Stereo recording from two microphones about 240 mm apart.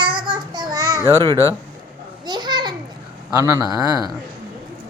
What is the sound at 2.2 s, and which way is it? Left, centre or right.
Children playing, centre.